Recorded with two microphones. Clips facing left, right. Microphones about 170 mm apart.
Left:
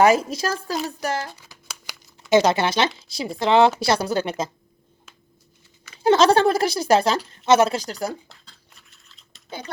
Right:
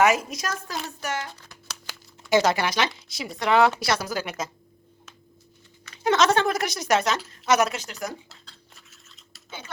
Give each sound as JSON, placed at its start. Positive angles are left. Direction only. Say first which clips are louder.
{"t": 0.0, "sound": "a woman's voice", "louder": "left 4 dB", "side_deg": 30}
{"t": 1.9, "sound": "a sound", "louder": "left 4 dB", "side_deg": 20}
{"t": 3.1, "sound": "speech", "louder": "left 3 dB", "side_deg": 30}
{"t": 6.0, "sound": "a woman's voice", "louder": "left 5 dB", "side_deg": 30}
{"t": 8.9, "sound": "a sound", "louder": "right 3 dB", "side_deg": 0}
{"t": 9.5, "sound": "speech", "louder": "left 5 dB", "side_deg": 40}